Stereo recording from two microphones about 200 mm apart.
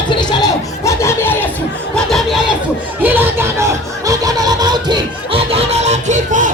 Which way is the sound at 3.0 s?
10° right (ahead or behind).